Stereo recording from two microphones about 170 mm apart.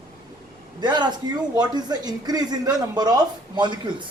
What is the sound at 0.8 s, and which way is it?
Speech, 25° right (ahead or behind).